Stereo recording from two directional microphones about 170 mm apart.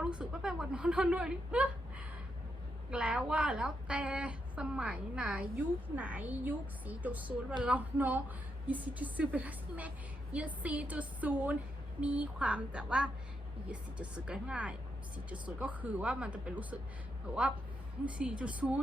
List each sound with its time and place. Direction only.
0.0 s a woman's voice: 5° right (ahead or behind)
2.9 s a woman's voice: 5° right (ahead or behind)
18.0 s a woman's voice: 5° right (ahead or behind)